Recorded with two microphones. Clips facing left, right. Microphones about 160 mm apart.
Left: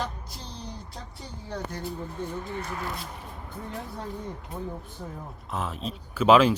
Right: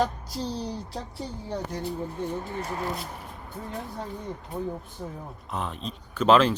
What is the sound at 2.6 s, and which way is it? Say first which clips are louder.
Speech: right 2 dB; 30° right (ahead or behind).